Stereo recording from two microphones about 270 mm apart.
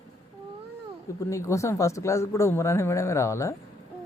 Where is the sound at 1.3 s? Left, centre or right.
Centre.